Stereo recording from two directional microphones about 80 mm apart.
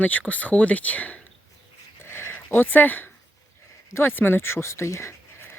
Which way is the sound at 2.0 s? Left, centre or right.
Left.